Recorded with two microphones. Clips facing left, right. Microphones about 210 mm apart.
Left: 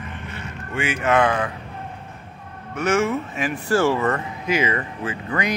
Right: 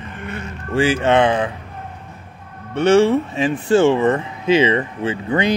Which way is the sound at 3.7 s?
20° right (ahead or behind).